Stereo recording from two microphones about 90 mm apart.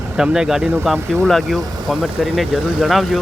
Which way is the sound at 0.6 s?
25° right (ahead or behind).